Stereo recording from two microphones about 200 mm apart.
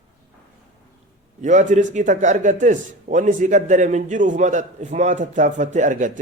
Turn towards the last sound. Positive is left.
turn(degrees=-40)  # may be behind; listen again after turning